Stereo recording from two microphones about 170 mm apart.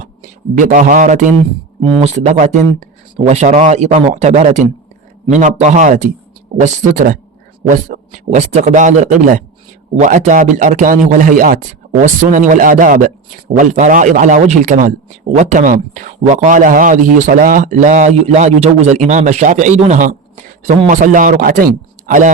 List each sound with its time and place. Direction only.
0.0 s speech: 50° right (ahead or behind)
1.8 s speech: 35° right (ahead or behind)